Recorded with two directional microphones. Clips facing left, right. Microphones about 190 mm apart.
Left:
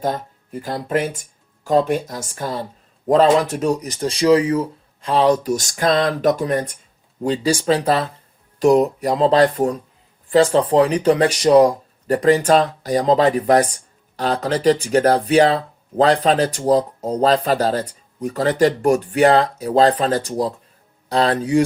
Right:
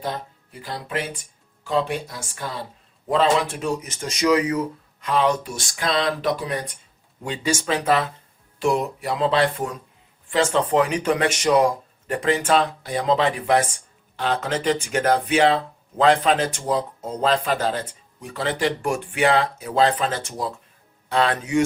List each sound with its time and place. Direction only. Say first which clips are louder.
0.0 s speech: left 6 dB; 45° left (ahead or behind)